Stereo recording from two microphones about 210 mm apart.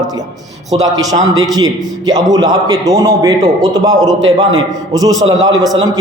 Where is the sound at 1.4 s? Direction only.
20° right (ahead or behind).